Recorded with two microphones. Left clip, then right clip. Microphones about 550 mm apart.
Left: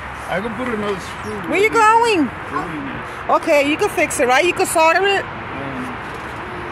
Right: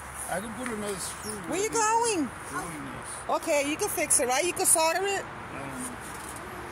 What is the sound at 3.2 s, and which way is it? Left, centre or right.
Speech, right.